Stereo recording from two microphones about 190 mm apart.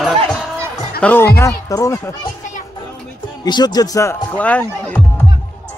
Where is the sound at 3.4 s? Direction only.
20° left (ahead or behind).